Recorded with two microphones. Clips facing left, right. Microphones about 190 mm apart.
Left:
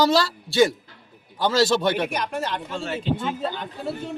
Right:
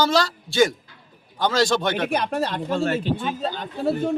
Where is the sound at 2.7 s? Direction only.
60° right (ahead or behind).